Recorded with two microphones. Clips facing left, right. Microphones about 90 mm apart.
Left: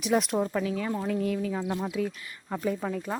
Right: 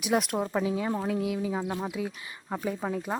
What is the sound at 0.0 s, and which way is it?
Speech, 5° right (ahead or behind).